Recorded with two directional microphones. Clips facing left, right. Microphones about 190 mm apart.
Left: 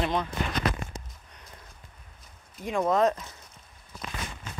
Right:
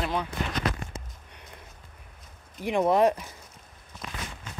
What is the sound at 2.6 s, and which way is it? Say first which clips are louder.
Speech: right 2 dB; 15° right (ahead or behind).